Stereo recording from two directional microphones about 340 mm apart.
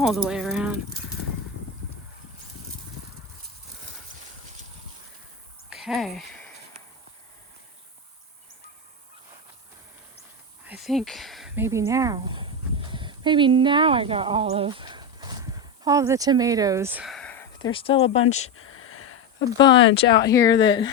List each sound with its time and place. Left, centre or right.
0.0 s speech: centre
5.7 s a sound: centre
10.7 s speech: centre
18.5 s a sound: left
19.8 s speech: left
20.1 s speech: centre